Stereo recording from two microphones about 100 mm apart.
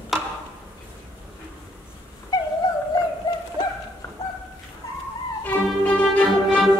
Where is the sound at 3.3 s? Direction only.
40° left (ahead or behind).